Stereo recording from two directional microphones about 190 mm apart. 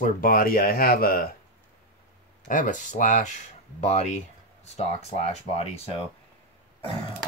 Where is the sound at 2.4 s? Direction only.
40° left (ahead or behind).